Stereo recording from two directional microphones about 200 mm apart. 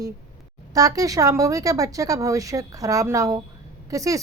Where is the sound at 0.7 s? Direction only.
15° right (ahead or behind).